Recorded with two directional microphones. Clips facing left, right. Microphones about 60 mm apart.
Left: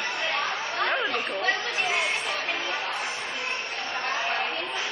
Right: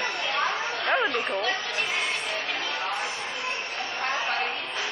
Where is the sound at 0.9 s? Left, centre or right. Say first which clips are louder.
Right 5 dB; right.